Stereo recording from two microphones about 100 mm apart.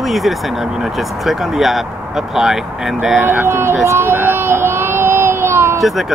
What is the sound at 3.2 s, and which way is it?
Speech, 25° right (ahead or behind).